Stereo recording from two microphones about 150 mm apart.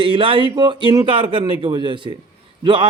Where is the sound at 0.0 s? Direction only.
35° right (ahead or behind).